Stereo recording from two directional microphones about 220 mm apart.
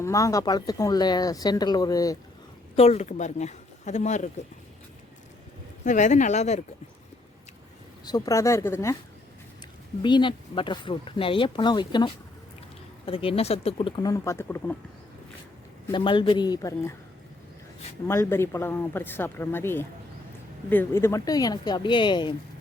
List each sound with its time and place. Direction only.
0.0 s speech: 15° left (ahead or behind)
2.7 s speech: 30° left (ahead or behind)
5.8 s speech: 35° left (ahead or behind)
8.0 s speech: 15° left (ahead or behind)
10.0 s speech: 20° left (ahead or behind)
15.9 s speech: 20° left (ahead or behind)
18.1 s speech: 10° left (ahead or behind)